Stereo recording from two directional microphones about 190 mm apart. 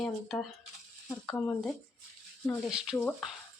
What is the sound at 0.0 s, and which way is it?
A woman's voice, centre (ahead or behind).